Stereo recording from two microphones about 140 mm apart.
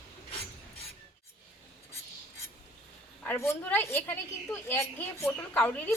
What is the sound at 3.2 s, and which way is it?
A woman's voice, 20° left (ahead or behind).